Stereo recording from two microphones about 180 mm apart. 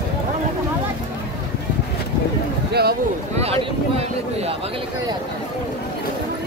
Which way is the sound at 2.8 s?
60° right (ahead or behind).